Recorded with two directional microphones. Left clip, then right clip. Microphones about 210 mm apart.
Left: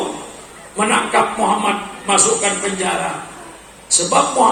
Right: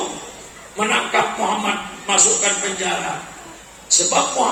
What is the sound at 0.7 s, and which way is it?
Speech, 30° left (ahead or behind).